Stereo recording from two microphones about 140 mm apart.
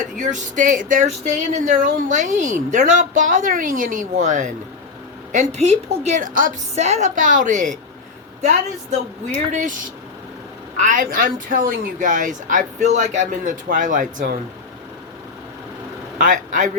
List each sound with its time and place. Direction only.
0.2 s speech: 60° right (ahead or behind)
6.7 s speech: 50° right (ahead or behind); by 14.3 s 70° right (ahead or behind)
16.2 s speech: 65° right (ahead or behind)